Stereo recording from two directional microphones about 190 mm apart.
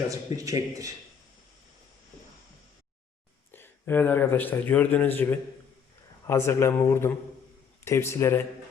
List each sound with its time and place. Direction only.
0.1 s a man's voice: 15° right (ahead or behind)
3.5 s speech: 10° left (ahead or behind)